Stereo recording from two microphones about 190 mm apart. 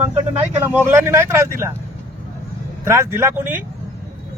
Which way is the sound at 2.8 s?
15° right (ahead or behind).